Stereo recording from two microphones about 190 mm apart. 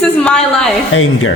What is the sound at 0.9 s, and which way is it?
Speech, 90° left.